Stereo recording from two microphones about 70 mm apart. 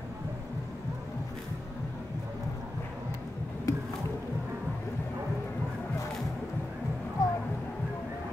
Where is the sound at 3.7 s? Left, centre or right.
Left.